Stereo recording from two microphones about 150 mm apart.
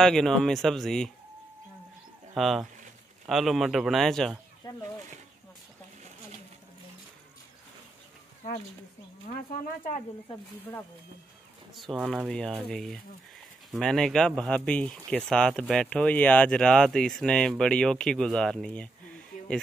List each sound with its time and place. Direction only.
0.0 s speech: 5° left (ahead or behind)
2.3 s speech: centre (ahead or behind)
4.6 s a sound: 30° left (ahead or behind)
9.3 s speech: 60° left (ahead or behind)
11.7 s speech: centre (ahead or behind)